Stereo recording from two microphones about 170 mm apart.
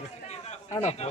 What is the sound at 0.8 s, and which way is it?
Speech, 40° left (ahead or behind).